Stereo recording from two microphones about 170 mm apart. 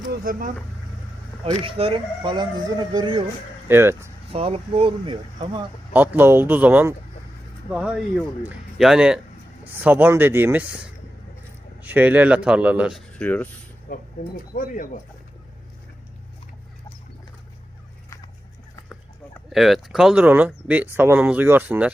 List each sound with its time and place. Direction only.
0.1 s speech: 55° right (ahead or behind)
1.5 s speech: 35° right (ahead or behind)
3.7 s speech: 15° right (ahead or behind)
4.3 s speech: 35° right (ahead or behind)
5.9 s speech: 10° right (ahead or behind)
13.1 s speech: 10° left (ahead or behind)
13.9 s speech: 60° left (ahead or behind)
19.5 s speech: centre (ahead or behind)